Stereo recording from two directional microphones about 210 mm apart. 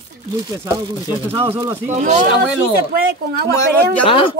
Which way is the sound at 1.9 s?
35° right (ahead or behind).